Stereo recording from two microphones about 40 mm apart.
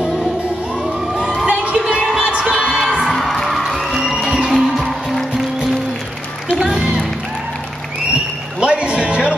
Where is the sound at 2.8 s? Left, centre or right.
Centre.